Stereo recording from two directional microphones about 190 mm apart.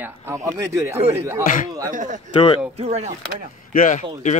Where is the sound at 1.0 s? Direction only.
35° right (ahead or behind).